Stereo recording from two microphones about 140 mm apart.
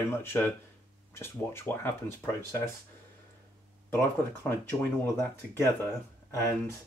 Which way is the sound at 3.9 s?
15° left (ahead or behind).